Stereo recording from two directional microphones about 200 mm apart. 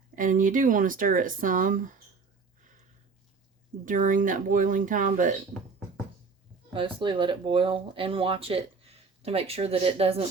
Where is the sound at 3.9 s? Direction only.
40° right (ahead or behind).